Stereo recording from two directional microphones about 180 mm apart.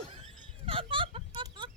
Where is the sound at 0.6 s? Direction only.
30° right (ahead or behind).